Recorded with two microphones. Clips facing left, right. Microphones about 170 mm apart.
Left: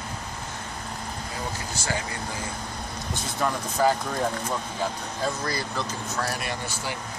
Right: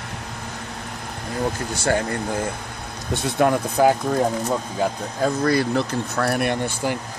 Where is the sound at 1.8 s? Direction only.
55° right (ahead or behind).